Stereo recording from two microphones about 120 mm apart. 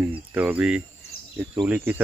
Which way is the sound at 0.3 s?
15° right (ahead or behind).